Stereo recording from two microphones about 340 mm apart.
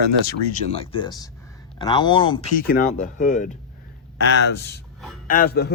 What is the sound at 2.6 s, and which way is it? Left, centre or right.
Speech, left.